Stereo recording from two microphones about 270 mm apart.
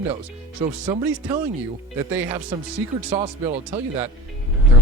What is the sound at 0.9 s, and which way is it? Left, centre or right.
Speech, centre.